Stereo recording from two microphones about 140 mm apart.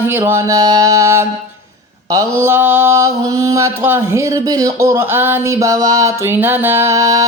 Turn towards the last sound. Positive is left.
turn(degrees=-25)  # may be behind; listen again after turning